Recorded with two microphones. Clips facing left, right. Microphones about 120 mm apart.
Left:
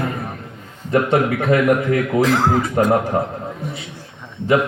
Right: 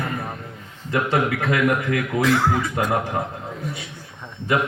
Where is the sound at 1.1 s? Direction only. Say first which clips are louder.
Left 4 dB; 35° left (ahead or behind).